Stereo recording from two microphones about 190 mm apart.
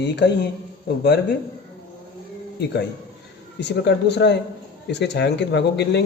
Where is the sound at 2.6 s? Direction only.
65° left (ahead or behind).